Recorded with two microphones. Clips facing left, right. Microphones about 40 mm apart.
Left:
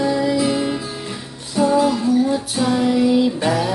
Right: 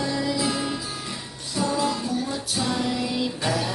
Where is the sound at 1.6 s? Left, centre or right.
Left.